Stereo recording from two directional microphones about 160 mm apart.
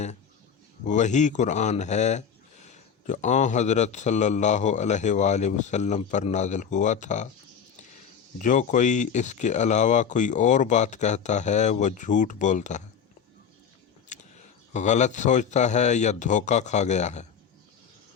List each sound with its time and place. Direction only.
0.9 s speech: 50° left (ahead or behind)
8.4 s speech: 50° left (ahead or behind)
14.1 s a sound: 50° left (ahead or behind)
14.7 s speech: 45° left (ahead or behind)